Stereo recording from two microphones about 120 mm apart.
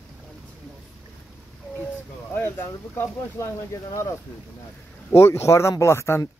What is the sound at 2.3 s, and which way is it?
Speech, 20° left (ahead or behind).